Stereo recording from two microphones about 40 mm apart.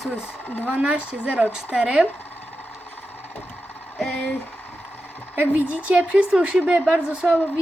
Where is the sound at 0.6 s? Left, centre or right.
Right.